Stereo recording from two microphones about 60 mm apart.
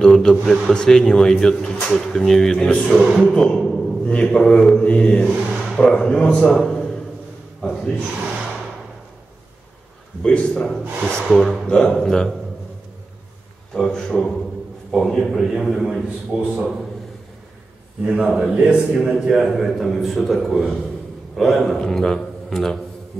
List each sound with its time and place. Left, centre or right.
0.0 s a man's voice: centre
3.3 s a sound: centre
4.0 s speech: centre
7.6 s a sound: centre
10.2 s speech: centre
13.7 s a man's voice: centre
18.0 s a man's voice: centre